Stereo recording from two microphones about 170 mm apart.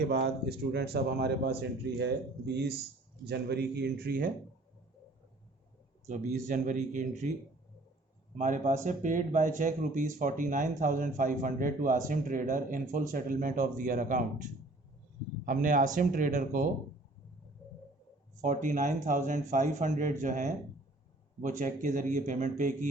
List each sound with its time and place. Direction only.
0.1 s a man's voice: 75° right (ahead or behind)
3.2 s a man's voice: 75° right (ahead or behind); by 4.3 s 60° right (ahead or behind)
6.1 s speech: 45° right (ahead or behind)
8.4 s speech: 45° right (ahead or behind)
15.4 s speech: 50° right (ahead or behind)
18.4 s speech: 50° right (ahead or behind)